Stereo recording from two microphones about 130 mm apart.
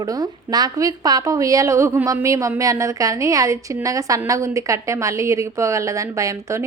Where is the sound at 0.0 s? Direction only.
30° right (ahead or behind).